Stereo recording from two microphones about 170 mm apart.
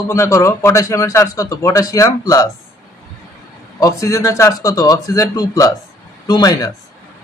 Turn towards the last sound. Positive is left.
turn(degrees=25)  # may be behind; listen again after turning